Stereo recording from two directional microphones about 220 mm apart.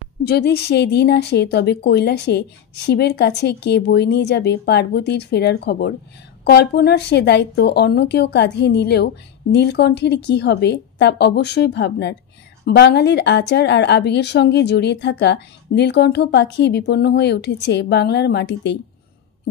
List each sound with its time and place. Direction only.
0.2 s a woman's voice: 45° left (ahead or behind)